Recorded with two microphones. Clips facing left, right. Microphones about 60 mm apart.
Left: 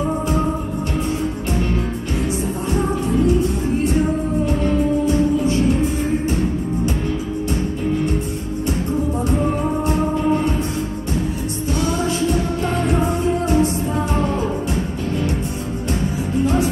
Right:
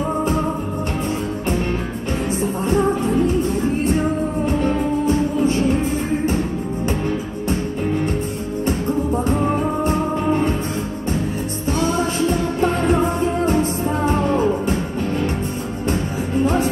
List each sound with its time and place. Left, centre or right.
13.5 s music: right
16.4 s music: right